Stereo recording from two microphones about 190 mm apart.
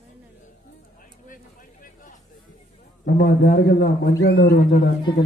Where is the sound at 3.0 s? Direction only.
60° left (ahead or behind).